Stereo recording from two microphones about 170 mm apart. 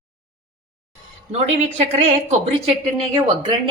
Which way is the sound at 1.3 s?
40° right (ahead or behind).